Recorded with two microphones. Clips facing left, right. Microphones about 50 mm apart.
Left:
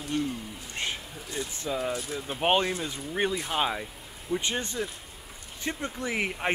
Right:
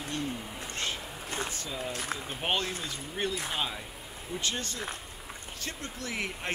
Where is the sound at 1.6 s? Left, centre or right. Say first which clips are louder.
Left 6 dB; left.